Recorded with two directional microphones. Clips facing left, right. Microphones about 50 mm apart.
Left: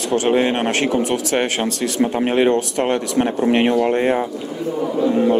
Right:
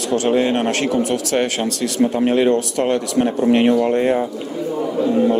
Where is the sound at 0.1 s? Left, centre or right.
Left.